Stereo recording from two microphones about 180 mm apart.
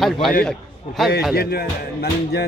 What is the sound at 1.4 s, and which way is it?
Music, 60° left (ahead or behind).